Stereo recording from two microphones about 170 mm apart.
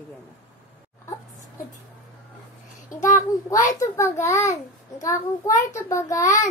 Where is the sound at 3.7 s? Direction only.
15° left (ahead or behind).